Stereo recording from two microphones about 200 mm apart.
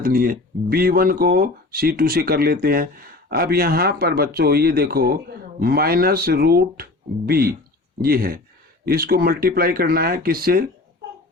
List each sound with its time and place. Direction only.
0.0 s speech: 45° right (ahead or behind)